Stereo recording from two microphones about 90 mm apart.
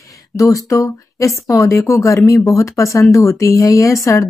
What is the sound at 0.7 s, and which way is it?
Speech, 35° left (ahead or behind).